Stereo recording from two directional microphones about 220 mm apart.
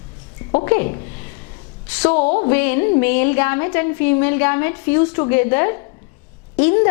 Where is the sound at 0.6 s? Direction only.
15° left (ahead or behind).